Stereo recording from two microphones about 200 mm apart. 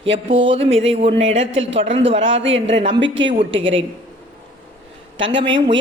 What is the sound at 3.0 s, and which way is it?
Speech, 65° right (ahead or behind).